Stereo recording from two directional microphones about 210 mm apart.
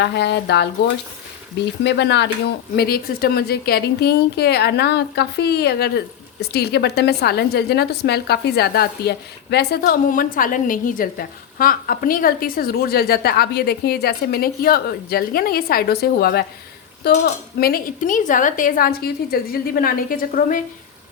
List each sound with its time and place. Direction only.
0.0 s a woman's voice: 55° left (ahead or behind)
1.8 s a woman's voice: 55° left (ahead or behind)